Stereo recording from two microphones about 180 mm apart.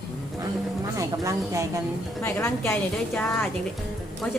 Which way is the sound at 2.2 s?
15° left (ahead or behind).